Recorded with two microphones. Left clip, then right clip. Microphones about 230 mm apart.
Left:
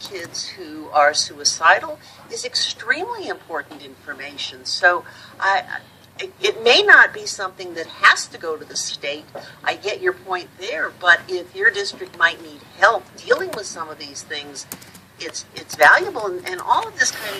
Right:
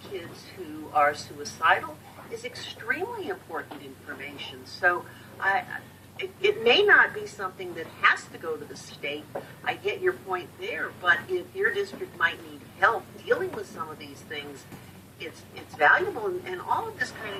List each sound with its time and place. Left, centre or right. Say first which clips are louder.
1.4 s a woman's voice: left 8 dB; centre
15.2 s a woman's voice: left 9 dB; centre